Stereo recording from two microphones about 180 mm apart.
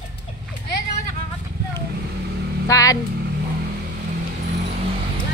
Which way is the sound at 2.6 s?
20° left (ahead or behind).